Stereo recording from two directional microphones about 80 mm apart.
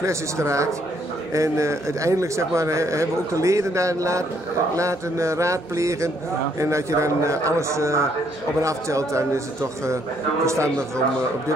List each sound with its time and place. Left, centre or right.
0.0 s speech: right
10.4 s speech: right